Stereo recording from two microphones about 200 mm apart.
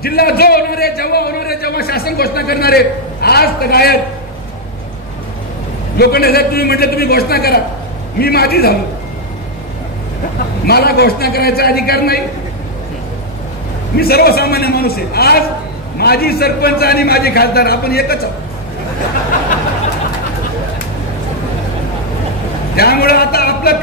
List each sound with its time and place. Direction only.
0.0 s a man's voice: 50° left (ahead or behind)
5.9 s a man's voice: 50° left (ahead or behind)
10.7 s a man's voice: 50° left (ahead or behind)
13.9 s a man's voice: 50° left (ahead or behind)
22.8 s a man's voice: 50° left (ahead or behind)